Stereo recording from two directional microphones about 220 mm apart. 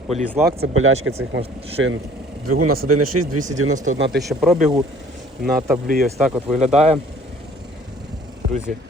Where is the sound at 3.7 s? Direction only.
35° right (ahead or behind).